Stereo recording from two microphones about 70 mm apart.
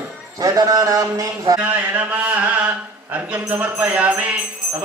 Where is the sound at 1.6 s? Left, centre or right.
Right.